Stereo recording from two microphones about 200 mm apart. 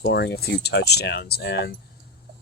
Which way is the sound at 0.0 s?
55° left (ahead or behind).